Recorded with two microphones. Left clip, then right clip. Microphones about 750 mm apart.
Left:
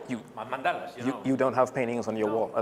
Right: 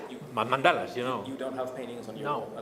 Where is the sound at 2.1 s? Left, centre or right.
Left.